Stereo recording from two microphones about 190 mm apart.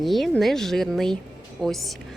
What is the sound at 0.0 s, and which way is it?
A woman's voice, centre (ahead or behind).